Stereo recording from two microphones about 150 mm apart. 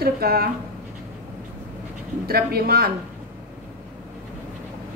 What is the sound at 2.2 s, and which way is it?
Speech, 90° right.